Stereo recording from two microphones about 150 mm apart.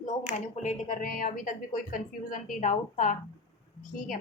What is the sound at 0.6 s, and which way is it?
A woman's voice, 55° left (ahead or behind).